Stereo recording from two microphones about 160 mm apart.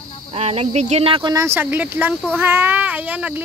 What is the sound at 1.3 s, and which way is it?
Speech, 15° right (ahead or behind).